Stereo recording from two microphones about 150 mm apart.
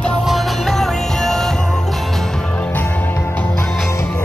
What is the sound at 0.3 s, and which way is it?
Music, centre (ahead or behind).